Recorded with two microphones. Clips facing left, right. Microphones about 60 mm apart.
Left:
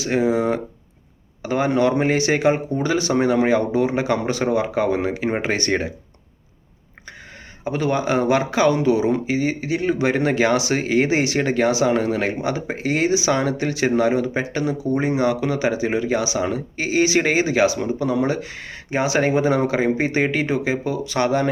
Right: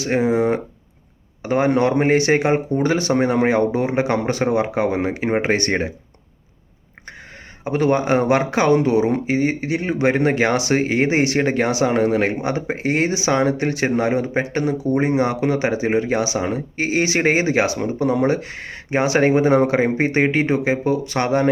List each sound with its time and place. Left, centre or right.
0.0 s speech: right
7.6 s speech: right